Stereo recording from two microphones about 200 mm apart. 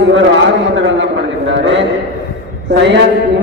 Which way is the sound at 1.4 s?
65° right (ahead or behind).